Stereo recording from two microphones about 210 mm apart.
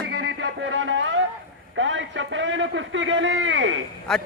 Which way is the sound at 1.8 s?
65° right (ahead or behind).